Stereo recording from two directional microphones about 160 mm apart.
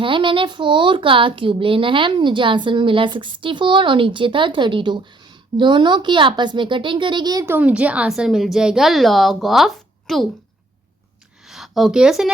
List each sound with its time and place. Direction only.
0.0 s speech: 30° right (ahead or behind)
7.4 s a woman's voice: 10° right (ahead or behind)
11.4 s a woman's voice: centre (ahead or behind)